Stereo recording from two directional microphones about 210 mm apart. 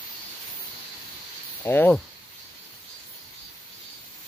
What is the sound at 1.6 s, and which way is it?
Speech, 10° left (ahead or behind).